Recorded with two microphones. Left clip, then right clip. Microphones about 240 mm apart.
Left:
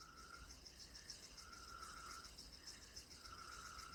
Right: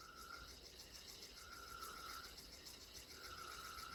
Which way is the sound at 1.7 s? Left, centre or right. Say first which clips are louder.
Right 3 dB; centre.